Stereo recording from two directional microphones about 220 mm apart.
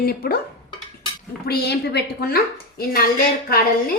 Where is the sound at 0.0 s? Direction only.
45° left (ahead or behind).